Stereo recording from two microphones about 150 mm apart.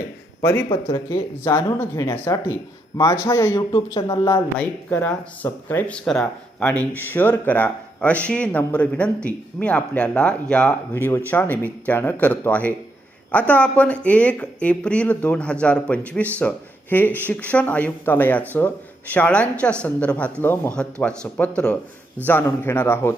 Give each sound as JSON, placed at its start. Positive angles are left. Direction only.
{"t": 0.9, "sound": "speech", "side_deg": 25}
{"t": 4.5, "sound": "speech", "side_deg": 10}